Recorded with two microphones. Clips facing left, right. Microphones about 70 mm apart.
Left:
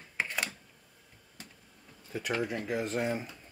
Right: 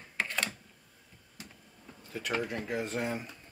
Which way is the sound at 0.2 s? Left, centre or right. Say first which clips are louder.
Even; centre.